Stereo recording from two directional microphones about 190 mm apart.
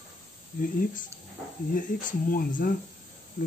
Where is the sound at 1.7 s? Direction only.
45° left (ahead or behind).